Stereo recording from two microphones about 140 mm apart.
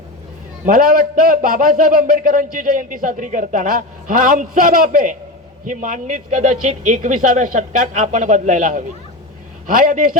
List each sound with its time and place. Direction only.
0.6 s a man's voice: 75° right (ahead or behind)